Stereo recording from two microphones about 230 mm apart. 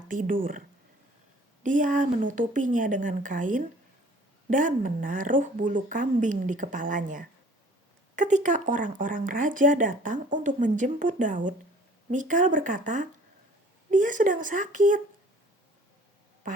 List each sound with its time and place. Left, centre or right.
0.1 s speech: right
1.6 s speech: right